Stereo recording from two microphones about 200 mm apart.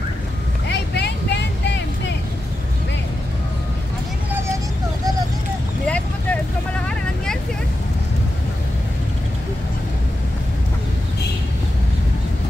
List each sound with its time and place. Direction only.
0.7 s vehicle: 55° left (ahead or behind)
4.3 s vehicle: 10° right (ahead or behind)
5.9 s vehicle: 5° left (ahead or behind)